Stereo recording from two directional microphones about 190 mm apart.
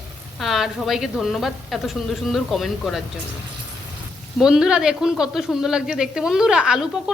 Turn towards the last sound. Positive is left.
turn(degrees=-5)  # may be behind; listen again after turning